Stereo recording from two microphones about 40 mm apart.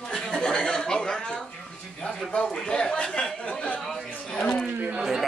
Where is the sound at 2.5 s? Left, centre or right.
Left.